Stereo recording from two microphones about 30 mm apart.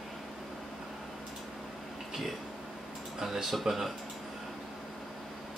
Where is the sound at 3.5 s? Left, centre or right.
Centre.